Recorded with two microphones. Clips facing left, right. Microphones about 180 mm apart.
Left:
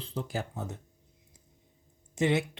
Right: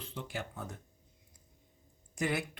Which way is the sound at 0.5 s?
20° left (ahead or behind).